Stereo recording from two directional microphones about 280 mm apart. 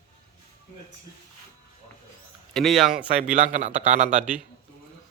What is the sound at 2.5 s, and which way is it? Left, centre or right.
Speech, centre.